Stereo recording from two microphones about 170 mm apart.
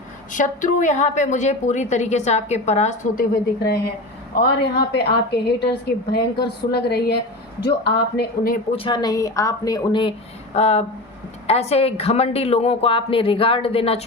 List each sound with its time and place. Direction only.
0.3 s a woman's voice: 50° left (ahead or behind)
4.4 s a woman's voice: 70° left (ahead or behind)
6.7 s a woman's voice: 70° left (ahead or behind)
8.7 s a woman's voice: 30° left (ahead or behind)